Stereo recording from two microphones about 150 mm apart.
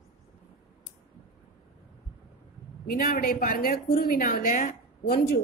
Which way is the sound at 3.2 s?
70° left (ahead or behind).